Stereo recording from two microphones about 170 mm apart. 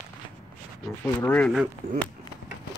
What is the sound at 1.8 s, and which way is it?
Speech, 55° right (ahead or behind).